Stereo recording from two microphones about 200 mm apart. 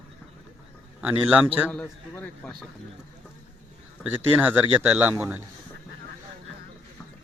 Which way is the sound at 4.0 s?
10° right (ahead or behind).